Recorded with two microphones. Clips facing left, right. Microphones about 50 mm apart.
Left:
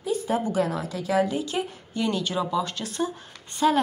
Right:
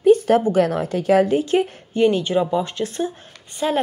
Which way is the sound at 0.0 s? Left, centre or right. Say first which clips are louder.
Right 12 dB; right.